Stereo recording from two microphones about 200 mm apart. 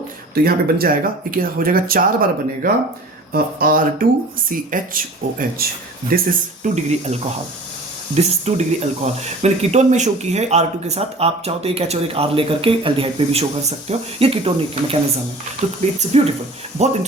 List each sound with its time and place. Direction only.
0.4 s speech: 45° right (ahead or behind); by 14.9 s 30° right (ahead or behind)
16.0 s speech: 30° right (ahead or behind)